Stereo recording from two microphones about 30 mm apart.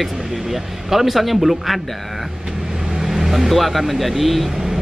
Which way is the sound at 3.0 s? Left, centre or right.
Centre.